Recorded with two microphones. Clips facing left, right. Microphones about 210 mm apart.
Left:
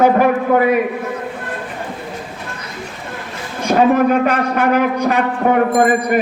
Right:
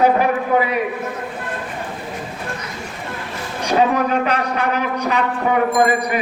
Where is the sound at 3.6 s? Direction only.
50° left (ahead or behind).